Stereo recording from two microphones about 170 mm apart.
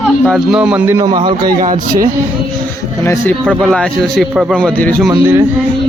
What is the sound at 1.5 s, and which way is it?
Speech, 50° right (ahead or behind).